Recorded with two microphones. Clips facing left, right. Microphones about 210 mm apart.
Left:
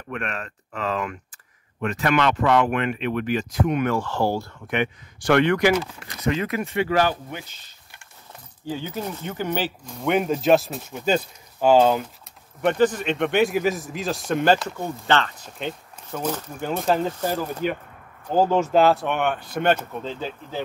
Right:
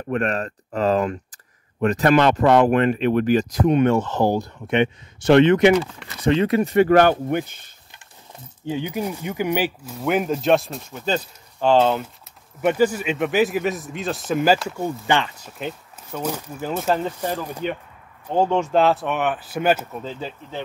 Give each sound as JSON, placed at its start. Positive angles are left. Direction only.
{"t": 0.1, "sound": "speech", "side_deg": -40}
{"t": 6.9, "sound": "speech", "side_deg": -60}
{"t": 8.6, "sound": "speech", "side_deg": -15}
{"t": 12.6, "sound": "speech", "side_deg": -10}